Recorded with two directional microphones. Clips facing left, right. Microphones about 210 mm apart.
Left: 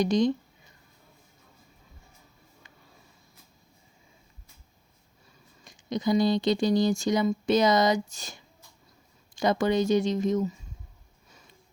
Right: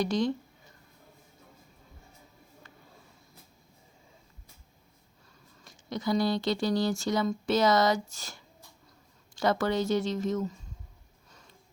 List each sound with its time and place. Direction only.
0.0 s speech: 15° left (ahead or behind)
5.6 s speech: 15° left (ahead or behind)